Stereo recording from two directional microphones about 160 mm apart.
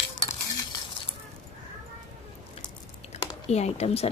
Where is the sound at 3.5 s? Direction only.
40° left (ahead or behind).